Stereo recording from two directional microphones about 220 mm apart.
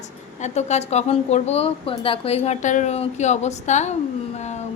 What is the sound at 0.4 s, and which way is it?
A woman's voice, 30° left (ahead or behind).